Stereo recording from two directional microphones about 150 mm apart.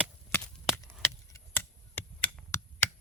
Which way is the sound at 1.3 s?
15° left (ahead or behind).